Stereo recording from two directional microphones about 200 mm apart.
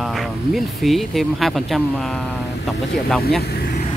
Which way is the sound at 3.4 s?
50° left (ahead or behind).